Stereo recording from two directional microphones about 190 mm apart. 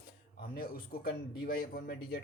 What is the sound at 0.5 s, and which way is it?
Speech, 50° left (ahead or behind).